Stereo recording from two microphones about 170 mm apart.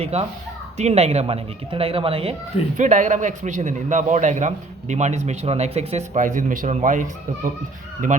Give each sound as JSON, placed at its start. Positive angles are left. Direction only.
{"t": 0.0, "sound": "speech", "side_deg": -35}
{"t": 2.7, "sound": "a man's voice", "side_deg": -45}